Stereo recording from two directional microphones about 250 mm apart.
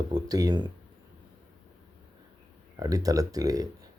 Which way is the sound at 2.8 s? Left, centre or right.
Centre.